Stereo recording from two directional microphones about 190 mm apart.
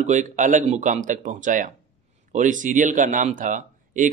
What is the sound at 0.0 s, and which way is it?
Speech, 40° right (ahead or behind).